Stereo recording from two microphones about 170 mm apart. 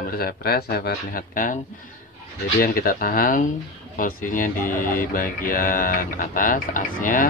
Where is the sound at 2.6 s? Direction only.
60° left (ahead or behind).